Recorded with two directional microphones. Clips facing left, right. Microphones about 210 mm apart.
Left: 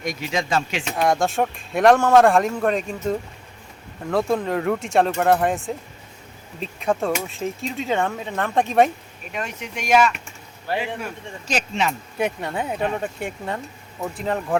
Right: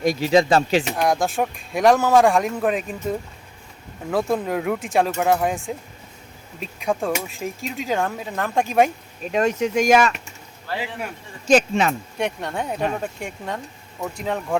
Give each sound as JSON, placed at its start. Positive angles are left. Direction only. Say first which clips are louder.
{"t": 0.0, "sound": "speech", "louder": "right 9 dB", "side_deg": -35}
{"t": 0.9, "sound": "speech", "louder": "left 1 dB", "side_deg": 0}
{"t": 9.4, "sound": "speech", "louder": "right 12 dB", "side_deg": -40}
{"t": 11.4, "sound": "speech", "louder": "right 8 dB", "side_deg": -50}
{"t": 12.1, "sound": "speech", "louder": "left 1 dB", "side_deg": 5}